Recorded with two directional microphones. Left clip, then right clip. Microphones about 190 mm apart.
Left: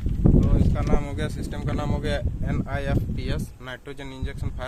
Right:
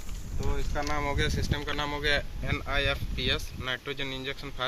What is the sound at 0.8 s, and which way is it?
Speech, 60° left (ahead or behind).